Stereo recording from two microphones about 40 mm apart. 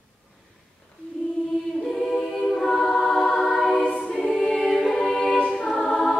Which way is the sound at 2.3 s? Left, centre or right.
Centre.